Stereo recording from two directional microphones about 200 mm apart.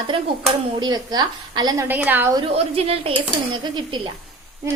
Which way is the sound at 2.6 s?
30° right (ahead or behind).